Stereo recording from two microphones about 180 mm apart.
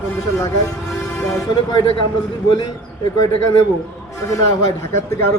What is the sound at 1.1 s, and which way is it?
Music, 15° left (ahead or behind).